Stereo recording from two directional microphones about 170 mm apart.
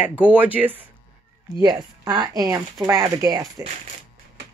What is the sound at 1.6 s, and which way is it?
Speech, 25° right (ahead or behind).